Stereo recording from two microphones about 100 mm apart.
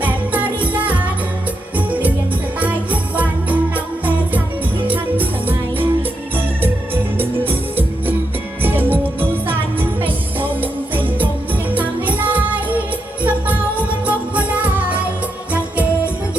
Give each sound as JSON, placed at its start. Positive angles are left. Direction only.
{"t": 0.0, "sound": "music", "side_deg": -15}
{"t": 10.0, "sound": "music", "side_deg": -20}